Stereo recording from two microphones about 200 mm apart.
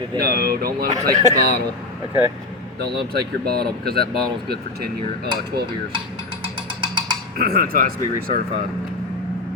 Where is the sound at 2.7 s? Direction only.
55° right (ahead or behind).